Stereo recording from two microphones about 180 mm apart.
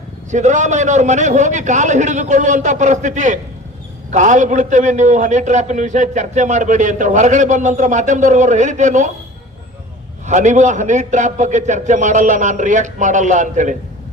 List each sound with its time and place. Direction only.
0.3 s a man's voice: 40° right (ahead or behind)
10.2 s a man's voice: 40° right (ahead or behind)